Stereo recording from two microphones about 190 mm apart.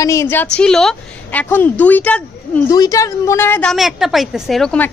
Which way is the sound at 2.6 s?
20° left (ahead or behind).